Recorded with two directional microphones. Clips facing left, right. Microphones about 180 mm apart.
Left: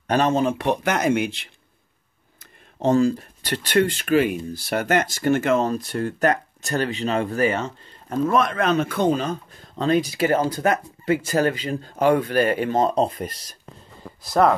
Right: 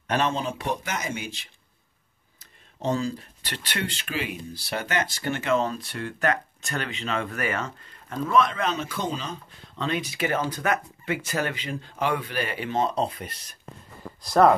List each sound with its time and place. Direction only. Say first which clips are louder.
0.0 s speech: left 6 dB; 40° left (ahead or behind); by 1.5 s 65° left (ahead or behind)
2.8 s speech: left 8 dB; 50° left (ahead or behind); by 7.7 s 25° left (ahead or behind)
8.1 s speech: left 3 dB; 50° left (ahead or behind)
14.2 s speech: even; centre (ahead or behind)